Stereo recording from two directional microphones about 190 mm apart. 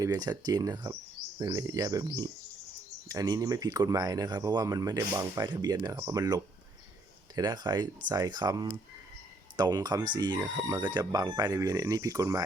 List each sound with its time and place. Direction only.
0.0 s speech: 20° right (ahead or behind)